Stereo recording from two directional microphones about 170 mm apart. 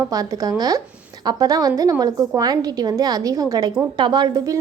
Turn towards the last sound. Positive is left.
turn(degrees=-25)  # may be behind; listen again after turning